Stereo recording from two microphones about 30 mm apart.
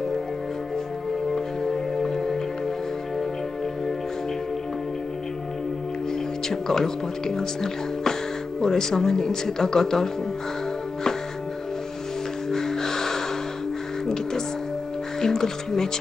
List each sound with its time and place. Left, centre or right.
1.3 s music: centre
6.5 s speech: centre
12.4 s music: centre